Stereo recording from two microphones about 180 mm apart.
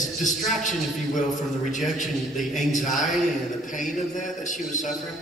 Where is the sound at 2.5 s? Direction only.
45° left (ahead or behind).